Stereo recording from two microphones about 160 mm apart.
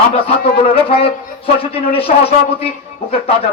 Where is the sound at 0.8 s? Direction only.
35° left (ahead or behind).